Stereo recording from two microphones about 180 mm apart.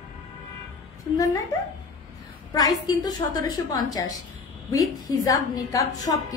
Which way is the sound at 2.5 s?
20° left (ahead or behind).